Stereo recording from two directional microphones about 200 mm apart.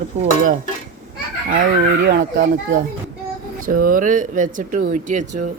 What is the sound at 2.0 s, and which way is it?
Speech, 60° right (ahead or behind).